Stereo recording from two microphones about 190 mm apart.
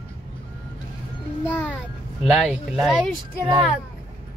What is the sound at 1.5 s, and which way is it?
Speech, 10° left (ahead or behind).